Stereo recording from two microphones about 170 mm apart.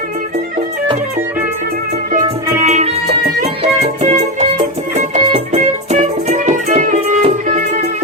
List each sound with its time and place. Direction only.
2.6 s music: 40° right (ahead or behind)